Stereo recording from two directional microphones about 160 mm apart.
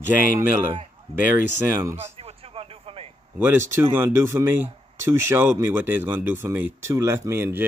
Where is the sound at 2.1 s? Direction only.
40° right (ahead or behind).